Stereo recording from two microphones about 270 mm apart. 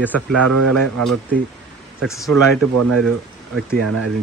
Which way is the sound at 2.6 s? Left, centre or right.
Right.